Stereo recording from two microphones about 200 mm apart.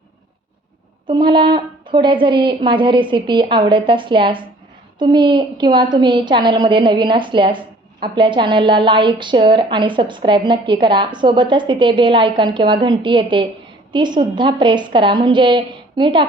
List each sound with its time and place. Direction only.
1.0 s a woman's voice: 25° right (ahead or behind)